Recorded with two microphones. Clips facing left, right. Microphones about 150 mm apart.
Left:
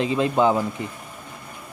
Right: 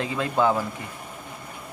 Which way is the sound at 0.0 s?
20° left (ahead or behind).